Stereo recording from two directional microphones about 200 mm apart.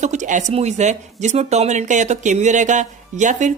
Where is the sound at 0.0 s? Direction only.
35° right (ahead or behind).